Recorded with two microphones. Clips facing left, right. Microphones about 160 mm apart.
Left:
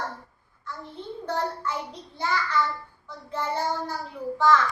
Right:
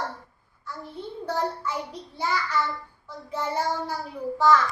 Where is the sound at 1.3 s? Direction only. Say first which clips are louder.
Right 1 dB; 10° right (ahead or behind).